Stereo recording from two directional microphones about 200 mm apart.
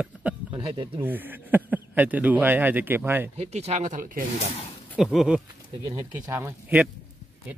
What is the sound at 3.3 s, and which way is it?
Speech, 30° right (ahead or behind).